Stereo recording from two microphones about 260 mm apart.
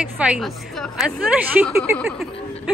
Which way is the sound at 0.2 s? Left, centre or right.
Centre.